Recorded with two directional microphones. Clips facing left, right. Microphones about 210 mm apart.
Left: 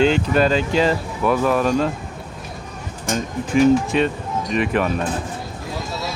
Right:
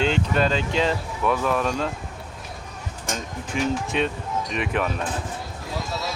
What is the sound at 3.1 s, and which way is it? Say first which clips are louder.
Speech: left 9 dB; centre (ahead or behind).